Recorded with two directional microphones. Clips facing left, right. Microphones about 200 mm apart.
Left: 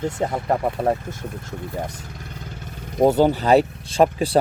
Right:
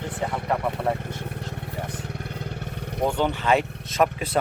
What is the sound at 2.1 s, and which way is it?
Vehicle, 65° right (ahead or behind).